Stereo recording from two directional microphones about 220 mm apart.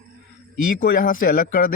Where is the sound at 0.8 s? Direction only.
40° left (ahead or behind).